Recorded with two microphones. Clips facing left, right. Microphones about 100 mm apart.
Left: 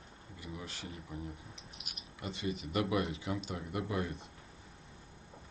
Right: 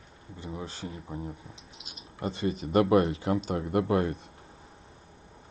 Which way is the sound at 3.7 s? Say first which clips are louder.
Right 11 dB; 60° right (ahead or behind).